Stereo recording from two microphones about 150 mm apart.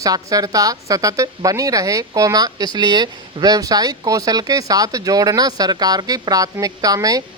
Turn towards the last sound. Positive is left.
turn(degrees=-25)  # may be behind; listen again after turning